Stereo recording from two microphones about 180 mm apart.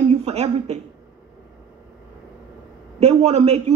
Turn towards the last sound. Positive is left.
turn(degrees=-35)  # may be behind; listen again after turning